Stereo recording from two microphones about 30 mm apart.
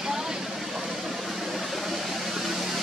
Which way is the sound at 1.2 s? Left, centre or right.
Centre.